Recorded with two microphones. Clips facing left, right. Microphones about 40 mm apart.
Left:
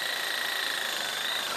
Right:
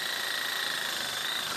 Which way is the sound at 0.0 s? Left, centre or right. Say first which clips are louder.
Left 2 dB; centre.